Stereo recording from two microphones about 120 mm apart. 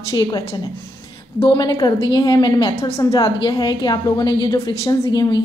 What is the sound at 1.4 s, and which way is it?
A woman's voice, 40° left (ahead or behind).